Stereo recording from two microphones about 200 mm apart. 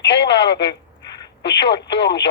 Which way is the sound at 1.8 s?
60° left (ahead or behind).